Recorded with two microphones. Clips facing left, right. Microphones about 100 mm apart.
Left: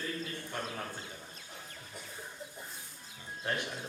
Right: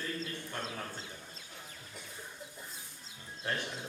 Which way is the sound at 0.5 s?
15° left (ahead or behind).